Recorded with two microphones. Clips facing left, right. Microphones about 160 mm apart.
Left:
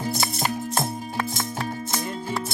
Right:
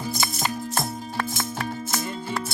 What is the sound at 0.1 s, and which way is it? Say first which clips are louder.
Music: left 2 dB; 30° left (ahead or behind).